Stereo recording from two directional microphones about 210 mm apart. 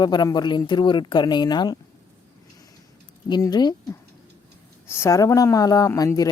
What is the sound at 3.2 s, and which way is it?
Speech, 20° left (ahead or behind).